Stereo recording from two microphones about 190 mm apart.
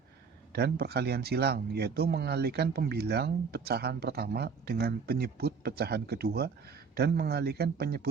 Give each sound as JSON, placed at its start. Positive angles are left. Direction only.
{"t": 0.5, "sound": "speech", "side_deg": -55}